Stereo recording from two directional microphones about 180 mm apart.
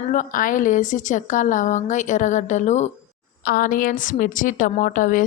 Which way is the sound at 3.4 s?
55° left (ahead or behind).